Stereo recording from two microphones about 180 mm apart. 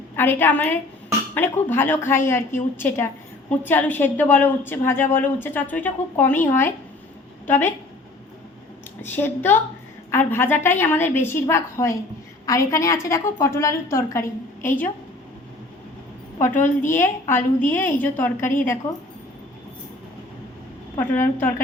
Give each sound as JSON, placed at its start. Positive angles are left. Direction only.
{"t": 0.2, "sound": "a woman's voice", "side_deg": 10}
{"t": 9.0, "sound": "a woman's voice", "side_deg": 10}
{"t": 16.9, "sound": "a woman's voice", "side_deg": 15}
{"t": 20.9, "sound": "a woman's voice", "side_deg": 15}